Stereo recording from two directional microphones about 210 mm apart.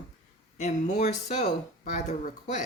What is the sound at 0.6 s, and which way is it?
Speech, 35° left (ahead or behind).